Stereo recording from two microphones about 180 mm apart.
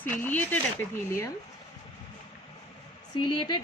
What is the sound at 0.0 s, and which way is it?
Speech, 10° left (ahead or behind).